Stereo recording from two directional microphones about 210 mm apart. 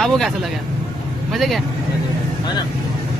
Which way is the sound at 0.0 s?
Centre (ahead or behind).